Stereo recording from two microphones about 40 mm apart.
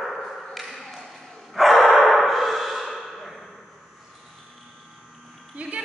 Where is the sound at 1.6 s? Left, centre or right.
Centre.